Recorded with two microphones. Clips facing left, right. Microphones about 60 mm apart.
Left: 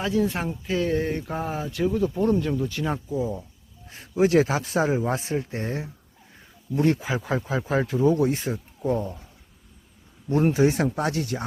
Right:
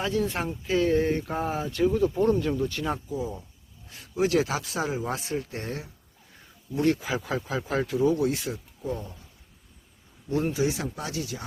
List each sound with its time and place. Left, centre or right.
0.0 s speech: centre
3.1 s speech: left
8.1 s speech: left
10.2 s speech: left